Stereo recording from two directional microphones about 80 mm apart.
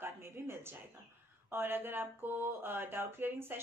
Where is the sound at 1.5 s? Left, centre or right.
Right.